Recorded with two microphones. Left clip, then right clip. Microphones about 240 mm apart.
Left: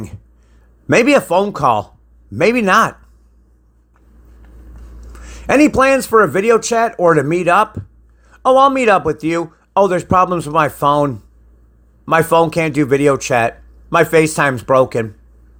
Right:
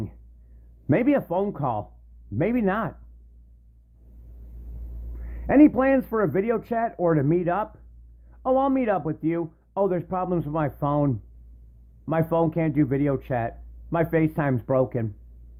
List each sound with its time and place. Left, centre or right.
0.9 s speech: left
5.2 s a man's voice: centre